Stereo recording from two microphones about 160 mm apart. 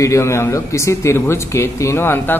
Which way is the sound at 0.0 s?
20° left (ahead or behind).